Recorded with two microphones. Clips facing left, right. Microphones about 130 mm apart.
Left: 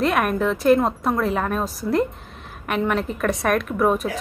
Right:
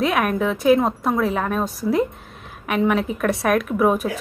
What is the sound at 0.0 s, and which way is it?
Speech, centre (ahead or behind).